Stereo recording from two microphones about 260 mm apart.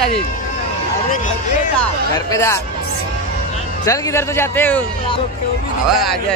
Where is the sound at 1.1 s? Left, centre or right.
Left.